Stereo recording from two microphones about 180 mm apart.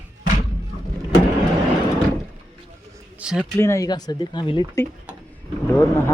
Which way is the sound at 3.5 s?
15° left (ahead or behind).